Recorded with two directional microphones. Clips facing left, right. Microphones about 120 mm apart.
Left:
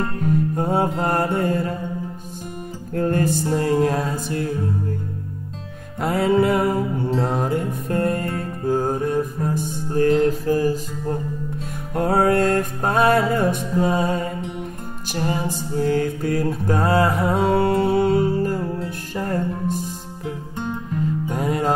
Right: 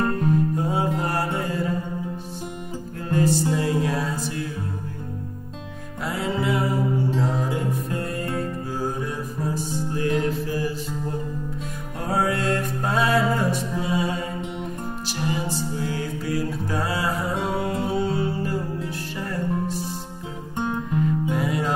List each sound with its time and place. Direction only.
0.6 s mantra: 55° left (ahead or behind)
3.0 s music: 55° left (ahead or behind)
5.9 s music: 55° left (ahead or behind)
11.9 s music: 60° left (ahead or behind)
21.3 s music: 45° left (ahead or behind)